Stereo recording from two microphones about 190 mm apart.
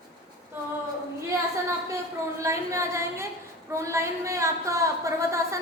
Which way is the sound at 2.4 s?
15° right (ahead or behind).